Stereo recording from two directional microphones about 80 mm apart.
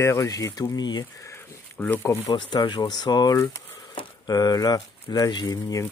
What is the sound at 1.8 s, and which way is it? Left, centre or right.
Speech, left.